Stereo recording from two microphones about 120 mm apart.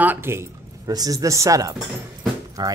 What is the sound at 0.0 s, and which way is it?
Speech, 15° right (ahead or behind).